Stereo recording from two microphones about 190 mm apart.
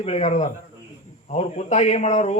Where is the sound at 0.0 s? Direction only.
35° left (ahead or behind).